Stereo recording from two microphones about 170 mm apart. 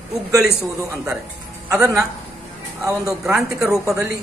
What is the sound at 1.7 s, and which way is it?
A man's voice, 20° right (ahead or behind).